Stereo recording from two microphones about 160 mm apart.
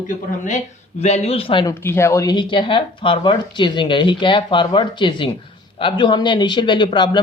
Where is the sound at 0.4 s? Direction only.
45° left (ahead or behind); by 1.7 s 30° left (ahead or behind).